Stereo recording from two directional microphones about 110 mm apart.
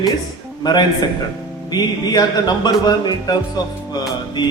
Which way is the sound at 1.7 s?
40° left (ahead or behind).